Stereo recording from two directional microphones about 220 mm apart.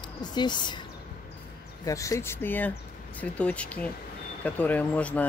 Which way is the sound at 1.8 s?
15° left (ahead or behind).